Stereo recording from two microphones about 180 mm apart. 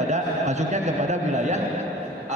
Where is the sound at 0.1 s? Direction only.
40° right (ahead or behind).